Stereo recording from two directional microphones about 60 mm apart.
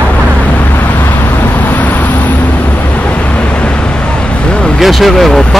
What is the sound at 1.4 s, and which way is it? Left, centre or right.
Vehicle, left.